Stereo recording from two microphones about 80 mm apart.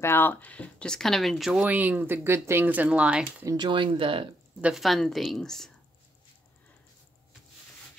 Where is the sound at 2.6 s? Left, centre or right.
Centre.